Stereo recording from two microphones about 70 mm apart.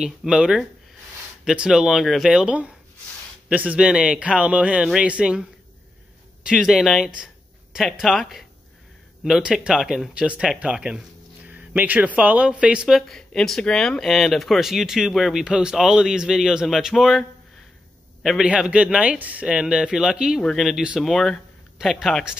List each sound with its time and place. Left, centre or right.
0.0 s speech: centre
3.4 s speech: centre
9.4 s speech: centre
10.1 s speech: centre
18.4 s speech: centre
19.4 s speech: centre
21.0 s speech: centre